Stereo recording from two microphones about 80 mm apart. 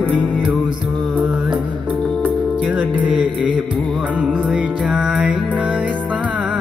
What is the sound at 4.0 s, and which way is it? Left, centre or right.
Music, centre.